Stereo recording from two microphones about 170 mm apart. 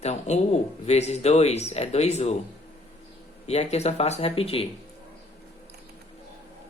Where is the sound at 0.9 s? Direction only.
40° left (ahead or behind).